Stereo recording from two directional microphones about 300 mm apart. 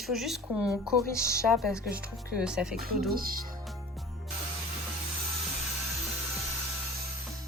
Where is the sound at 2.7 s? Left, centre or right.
Right.